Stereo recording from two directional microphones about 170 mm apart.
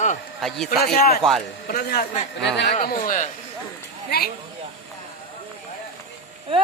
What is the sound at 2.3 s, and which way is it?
Speech, 90° left.